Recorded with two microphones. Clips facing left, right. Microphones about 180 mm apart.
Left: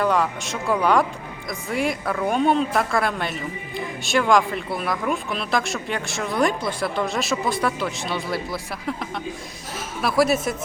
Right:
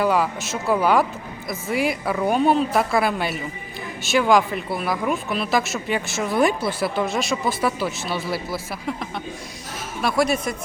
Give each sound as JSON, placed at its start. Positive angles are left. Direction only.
{"t": 0.0, "sound": "speech", "side_deg": -5}